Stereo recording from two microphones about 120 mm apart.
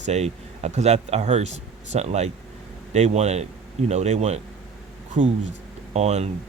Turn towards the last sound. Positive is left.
turn(degrees=-65)  # may be behind; listen again after turning